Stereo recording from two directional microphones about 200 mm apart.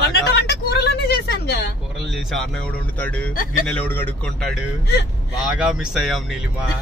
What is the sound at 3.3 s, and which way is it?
Speech, 40° left (ahead or behind).